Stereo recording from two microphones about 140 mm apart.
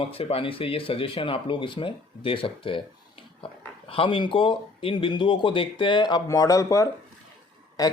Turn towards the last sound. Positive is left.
turn(degrees=25)  # may be behind; listen again after turning